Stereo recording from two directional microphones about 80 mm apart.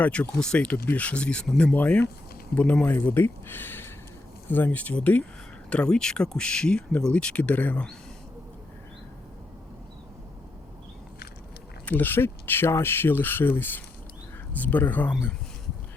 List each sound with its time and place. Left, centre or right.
0.0 s speech: centre
11.9 s speech: left